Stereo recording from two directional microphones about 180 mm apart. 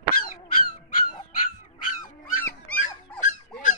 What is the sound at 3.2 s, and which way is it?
Dog, 45° left (ahead or behind).